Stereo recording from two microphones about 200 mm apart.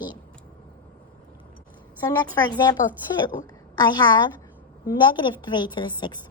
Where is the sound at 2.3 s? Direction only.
20° left (ahead or behind).